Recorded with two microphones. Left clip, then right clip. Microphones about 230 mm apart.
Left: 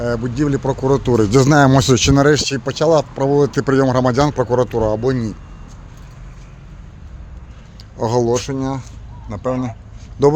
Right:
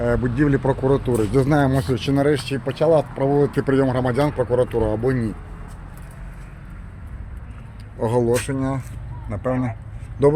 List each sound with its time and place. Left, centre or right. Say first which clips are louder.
0.0 s speech: left 1 dB; centre
0.8 s speech: left 4 dB; left; by 5.3 s centre
7.9 s speech: left 3 dB; left
9.3 s speech: left 3 dB; centre